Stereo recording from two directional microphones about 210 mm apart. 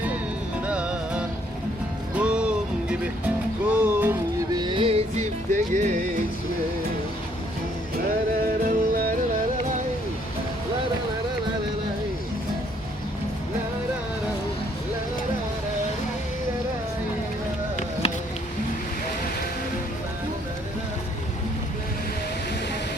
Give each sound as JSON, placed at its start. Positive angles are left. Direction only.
{"t": 0.6, "sound": "music", "side_deg": -5}
{"t": 8.6, "sound": "music", "side_deg": -45}